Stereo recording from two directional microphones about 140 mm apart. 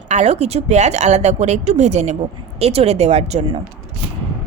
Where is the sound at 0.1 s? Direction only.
50° right (ahead or behind).